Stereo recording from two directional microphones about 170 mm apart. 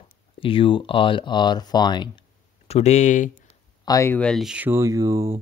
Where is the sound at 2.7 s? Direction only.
40° left (ahead or behind).